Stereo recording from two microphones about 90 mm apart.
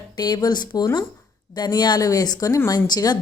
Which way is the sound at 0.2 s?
50° left (ahead or behind).